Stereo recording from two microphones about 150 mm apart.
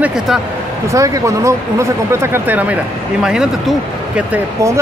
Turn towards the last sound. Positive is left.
turn(degrees=-15)  # may be behind; listen again after turning